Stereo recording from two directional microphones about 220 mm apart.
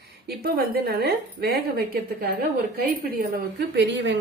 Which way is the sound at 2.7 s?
40° right (ahead or behind).